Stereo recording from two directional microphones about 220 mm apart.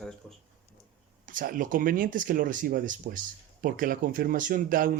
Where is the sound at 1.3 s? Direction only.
40° right (ahead or behind).